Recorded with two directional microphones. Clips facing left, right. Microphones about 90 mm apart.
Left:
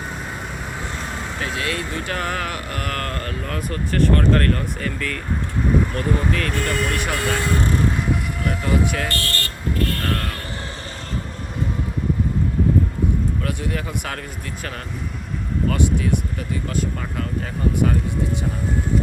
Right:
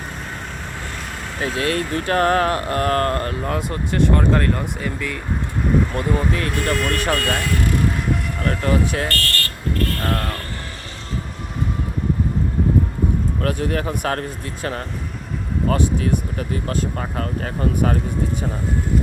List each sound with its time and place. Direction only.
1.4 s speech: 30° right (ahead or behind)
6.6 s speech: centre (ahead or behind)
7.2 s speech: 25° left (ahead or behind)
9.0 s speech: 20° left (ahead or behind)
10.0 s a sound: 10° right (ahead or behind)
13.4 s speech: 45° right (ahead or behind)